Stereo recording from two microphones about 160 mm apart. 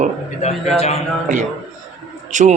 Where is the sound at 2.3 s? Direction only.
50° right (ahead or behind).